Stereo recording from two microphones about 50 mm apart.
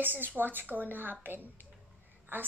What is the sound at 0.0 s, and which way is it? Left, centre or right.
Speech, right.